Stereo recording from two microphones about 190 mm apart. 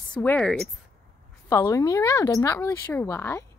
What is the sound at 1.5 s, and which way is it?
A woman's voice, 15° left (ahead or behind).